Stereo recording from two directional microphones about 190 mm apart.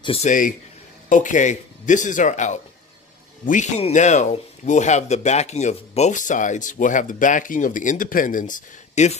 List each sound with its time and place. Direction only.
0.0 s speech: 30° left (ahead or behind)
0.3 s speech: 45° left (ahead or behind)